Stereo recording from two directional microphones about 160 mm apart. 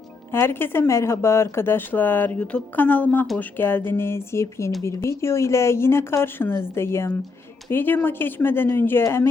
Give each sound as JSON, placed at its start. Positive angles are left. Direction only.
{"t": 0.3, "sound": "speech", "side_deg": 15}